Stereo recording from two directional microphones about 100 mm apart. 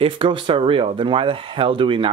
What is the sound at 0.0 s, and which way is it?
Speech, 60° right (ahead or behind).